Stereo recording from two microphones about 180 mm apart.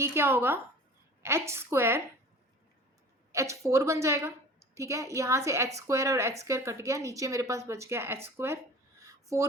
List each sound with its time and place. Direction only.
0.0 s a woman's voice: 15° right (ahead or behind)
3.3 s a woman's voice: 15° right (ahead or behind)
9.0 s a sound: 15° right (ahead or behind)